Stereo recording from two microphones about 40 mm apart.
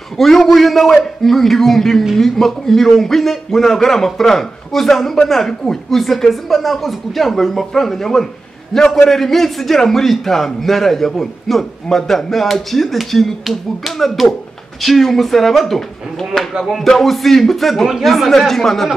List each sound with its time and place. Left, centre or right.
0.2 s a man's voice: centre